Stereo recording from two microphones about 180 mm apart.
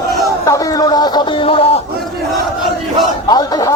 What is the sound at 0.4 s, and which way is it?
Speech, 20° left (ahead or behind).